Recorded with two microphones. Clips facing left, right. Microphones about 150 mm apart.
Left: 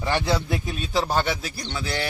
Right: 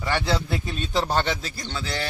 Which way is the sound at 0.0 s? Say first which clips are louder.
Left 1 dB; 15° left (ahead or behind).